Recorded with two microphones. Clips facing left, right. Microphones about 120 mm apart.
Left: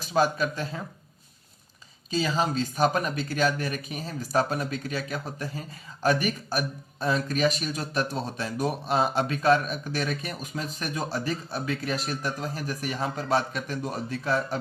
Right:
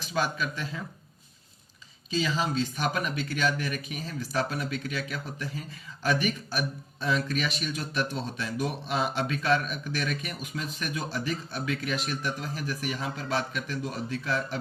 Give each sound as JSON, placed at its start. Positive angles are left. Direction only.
{"t": 0.0, "sound": "speech", "side_deg": 40}
{"t": 2.0, "sound": "speech", "side_deg": 45}